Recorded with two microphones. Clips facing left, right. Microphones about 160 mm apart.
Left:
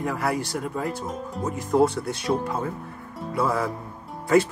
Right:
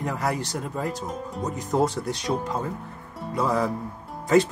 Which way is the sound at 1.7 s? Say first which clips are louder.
Left 3 dB; 20° right (ahead or behind).